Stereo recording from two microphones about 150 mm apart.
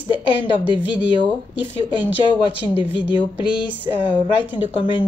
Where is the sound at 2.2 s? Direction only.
30° left (ahead or behind).